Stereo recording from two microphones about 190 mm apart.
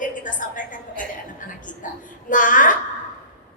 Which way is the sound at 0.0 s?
45° left (ahead or behind).